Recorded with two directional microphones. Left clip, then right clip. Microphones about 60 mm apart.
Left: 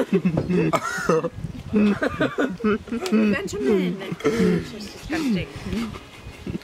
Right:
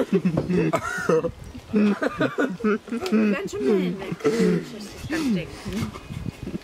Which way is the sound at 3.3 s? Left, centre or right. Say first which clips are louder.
Left 1 dB; left.